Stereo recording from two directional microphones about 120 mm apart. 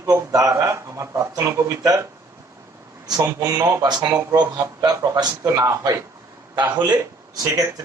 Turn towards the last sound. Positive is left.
turn(degrees=-30)  # may be behind; listen again after turning